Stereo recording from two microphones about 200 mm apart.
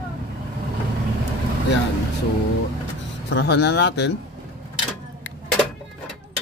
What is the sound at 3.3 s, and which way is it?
Speech, 55° left (ahead or behind).